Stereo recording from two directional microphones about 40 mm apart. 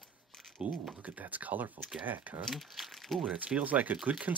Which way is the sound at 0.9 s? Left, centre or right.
Right.